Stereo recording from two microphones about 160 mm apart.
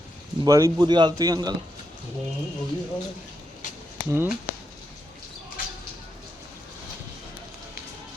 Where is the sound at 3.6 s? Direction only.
55° left (ahead or behind).